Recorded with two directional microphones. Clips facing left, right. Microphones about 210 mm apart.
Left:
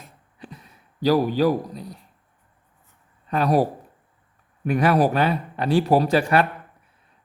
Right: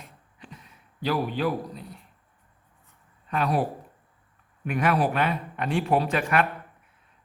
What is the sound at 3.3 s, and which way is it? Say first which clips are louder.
Speech: left 6 dB; 40° left (ahead or behind).